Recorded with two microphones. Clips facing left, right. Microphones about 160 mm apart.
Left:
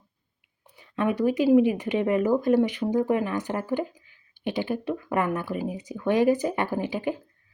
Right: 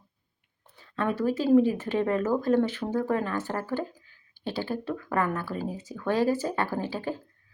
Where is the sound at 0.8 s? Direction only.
15° left (ahead or behind).